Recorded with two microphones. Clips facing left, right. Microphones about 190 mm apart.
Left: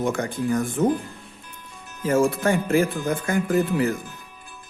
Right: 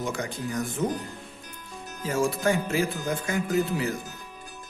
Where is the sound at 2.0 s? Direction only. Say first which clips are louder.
Left 5 dB; 55° left (ahead or behind).